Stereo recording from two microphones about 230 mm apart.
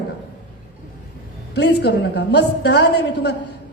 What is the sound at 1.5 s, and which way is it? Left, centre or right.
A woman's voice, left.